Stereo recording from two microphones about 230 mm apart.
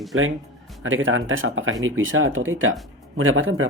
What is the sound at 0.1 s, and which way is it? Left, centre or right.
Speech, right.